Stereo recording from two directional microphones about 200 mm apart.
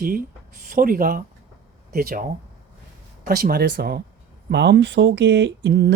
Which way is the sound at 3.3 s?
50° right (ahead or behind).